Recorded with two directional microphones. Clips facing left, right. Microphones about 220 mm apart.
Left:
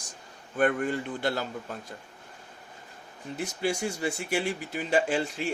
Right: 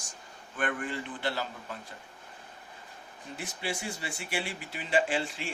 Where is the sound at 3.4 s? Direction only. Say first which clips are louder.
Left 7 dB; 45° left (ahead or behind).